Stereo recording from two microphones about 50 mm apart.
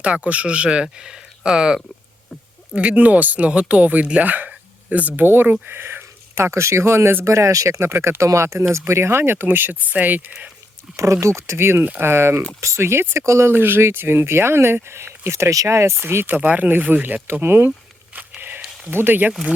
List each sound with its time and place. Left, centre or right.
0.0 s speech: right
2.7 s speech: right
4.4 s a sound: right
5.2 s speech: right
7.3 s speech: right
8.2 s speech: right
10.9 s speech: right
12.5 s speech: right
13.5 s speech: right
16.0 s speech: right
17.4 s speech: right
18.1 s a sound: right
18.9 s speech: right